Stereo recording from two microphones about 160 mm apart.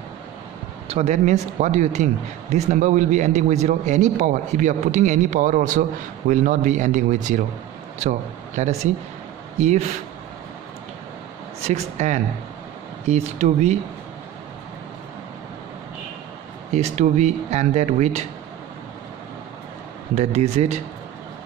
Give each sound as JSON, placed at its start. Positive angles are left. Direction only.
{"t": 0.8, "sound": "a man's voice", "side_deg": -45}
{"t": 11.6, "sound": "a man's voice", "side_deg": -45}
{"t": 16.7, "sound": "a man's voice", "side_deg": -45}
{"t": 20.2, "sound": "speech", "side_deg": -40}